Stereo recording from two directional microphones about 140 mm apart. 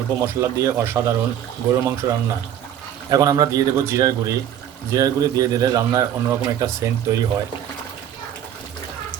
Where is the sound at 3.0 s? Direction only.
25° right (ahead or behind).